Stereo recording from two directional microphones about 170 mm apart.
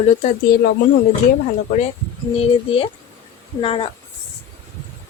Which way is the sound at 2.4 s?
35° left (ahead or behind).